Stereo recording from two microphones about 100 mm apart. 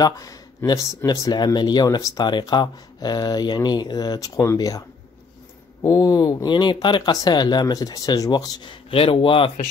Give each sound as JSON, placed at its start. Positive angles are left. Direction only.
{"t": 0.0, "sound": "speech", "side_deg": 35}
{"t": 7.0, "sound": "speech", "side_deg": 40}
{"t": 8.9, "sound": "speech", "side_deg": 65}